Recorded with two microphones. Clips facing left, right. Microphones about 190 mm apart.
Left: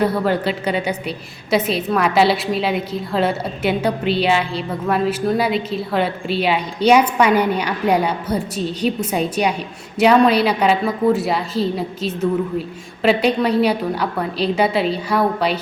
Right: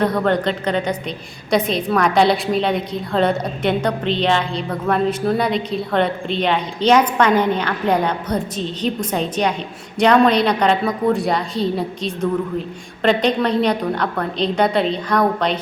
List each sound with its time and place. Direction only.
0.0 s a woman's voice: 5° left (ahead or behind)